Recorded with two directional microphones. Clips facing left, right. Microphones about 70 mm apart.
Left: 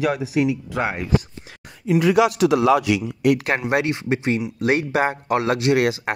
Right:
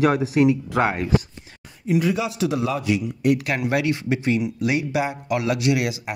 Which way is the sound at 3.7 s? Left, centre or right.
Left.